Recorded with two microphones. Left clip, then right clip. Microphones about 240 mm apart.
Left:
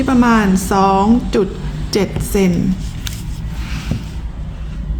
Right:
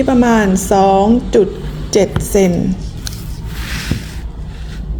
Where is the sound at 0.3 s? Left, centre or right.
Centre.